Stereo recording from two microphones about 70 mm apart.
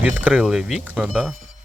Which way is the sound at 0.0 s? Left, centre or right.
Right.